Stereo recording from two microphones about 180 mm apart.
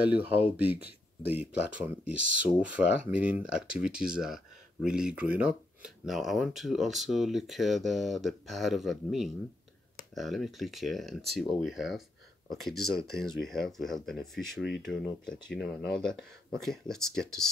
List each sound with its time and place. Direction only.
0.1 s speech: 10° right (ahead or behind)
2.1 s speech: 45° right (ahead or behind)
3.2 s speech: 5° right (ahead or behind)